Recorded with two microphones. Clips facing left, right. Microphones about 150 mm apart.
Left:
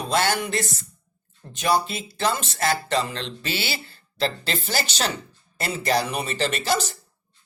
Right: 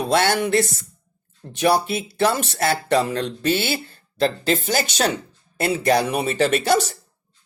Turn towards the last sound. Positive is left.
turn(degrees=-50)  # may be behind; listen again after turning